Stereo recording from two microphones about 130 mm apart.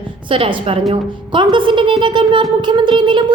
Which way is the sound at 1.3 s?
40° right (ahead or behind).